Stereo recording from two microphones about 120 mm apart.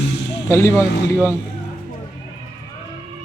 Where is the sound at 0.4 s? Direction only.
25° left (ahead or behind).